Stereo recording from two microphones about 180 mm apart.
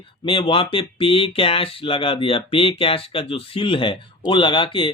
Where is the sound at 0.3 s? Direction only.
30° left (ahead or behind).